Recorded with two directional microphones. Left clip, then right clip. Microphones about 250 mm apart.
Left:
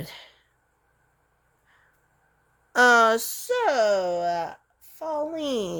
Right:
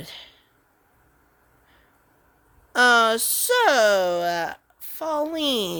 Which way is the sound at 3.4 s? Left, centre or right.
Right.